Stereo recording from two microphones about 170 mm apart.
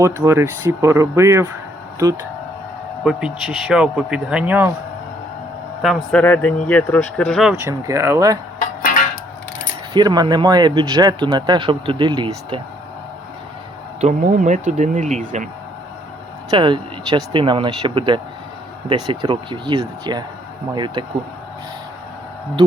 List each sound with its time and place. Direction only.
0.0 s speech: 15° right (ahead or behind)
3.0 s speech: 5° right (ahead or behind)
5.8 s speech: centre (ahead or behind)
7.6 s speech: 15° right (ahead or behind)
9.9 s speech: 25° right (ahead or behind)
14.0 s speech: 45° right (ahead or behind)
16.5 s speech: 30° right (ahead or behind)